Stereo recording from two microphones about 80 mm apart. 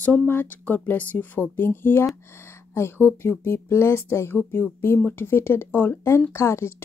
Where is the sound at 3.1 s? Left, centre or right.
Left.